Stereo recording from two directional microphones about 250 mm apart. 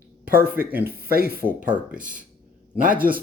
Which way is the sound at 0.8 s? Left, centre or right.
Right.